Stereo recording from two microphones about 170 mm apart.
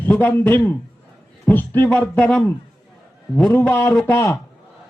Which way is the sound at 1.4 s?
10° left (ahead or behind).